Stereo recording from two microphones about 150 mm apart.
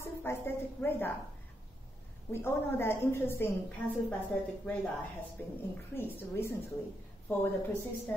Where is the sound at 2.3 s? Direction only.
15° left (ahead or behind).